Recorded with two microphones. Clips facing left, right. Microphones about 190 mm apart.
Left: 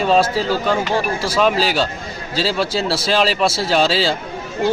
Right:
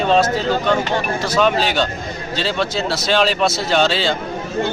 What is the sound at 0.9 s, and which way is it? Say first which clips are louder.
Speech: left 1 dB; 30° left (ahead or behind).